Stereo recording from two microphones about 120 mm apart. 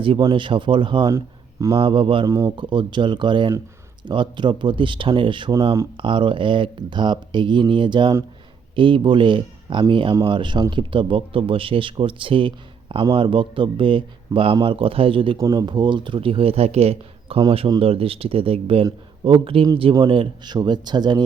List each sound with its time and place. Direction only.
0.0 s speech: 45° right (ahead or behind)
2.2 s a man's voice: 30° right (ahead or behind); by 15.4 s 45° right (ahead or behind)
15.4 s speech: 30° right (ahead or behind); by 19.6 s 50° right (ahead or behind)
19.6 s speech: 35° right (ahead or behind)